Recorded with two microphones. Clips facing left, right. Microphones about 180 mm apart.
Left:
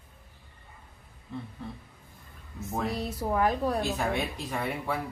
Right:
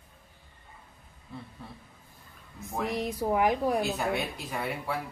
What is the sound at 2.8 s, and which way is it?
A woman's voice, 15° right (ahead or behind).